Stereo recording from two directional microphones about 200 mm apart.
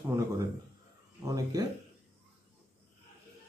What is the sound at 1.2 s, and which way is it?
Speech, 20° right (ahead or behind).